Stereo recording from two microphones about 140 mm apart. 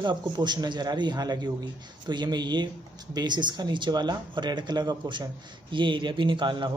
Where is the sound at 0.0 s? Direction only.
30° right (ahead or behind).